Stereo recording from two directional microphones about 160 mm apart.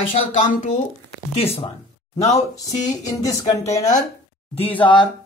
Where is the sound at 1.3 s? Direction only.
40° left (ahead or behind).